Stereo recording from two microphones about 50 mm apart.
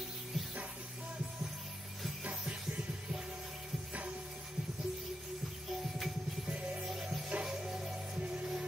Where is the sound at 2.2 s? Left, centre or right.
Right.